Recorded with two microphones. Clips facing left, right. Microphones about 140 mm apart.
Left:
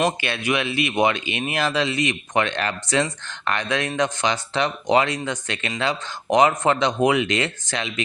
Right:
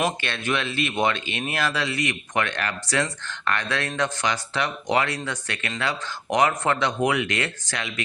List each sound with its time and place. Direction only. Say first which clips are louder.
0.2 s speech: left 3 dB; 10° left (ahead or behind)